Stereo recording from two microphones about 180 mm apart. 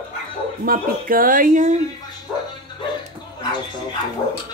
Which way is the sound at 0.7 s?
50° right (ahead or behind).